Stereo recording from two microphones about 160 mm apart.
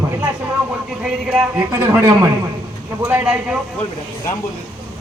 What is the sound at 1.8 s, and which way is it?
A man's voice, 15° right (ahead or behind).